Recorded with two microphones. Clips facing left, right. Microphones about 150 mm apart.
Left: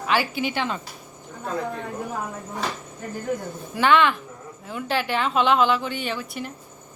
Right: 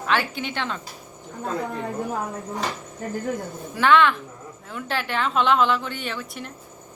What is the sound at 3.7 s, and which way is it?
A woman's voice, centre (ahead or behind).